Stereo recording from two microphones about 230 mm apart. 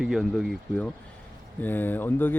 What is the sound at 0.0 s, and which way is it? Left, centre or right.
Speech, centre.